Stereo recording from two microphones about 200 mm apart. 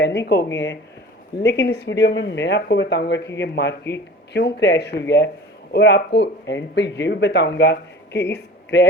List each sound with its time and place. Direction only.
0.0 s speech: 55° left (ahead or behind)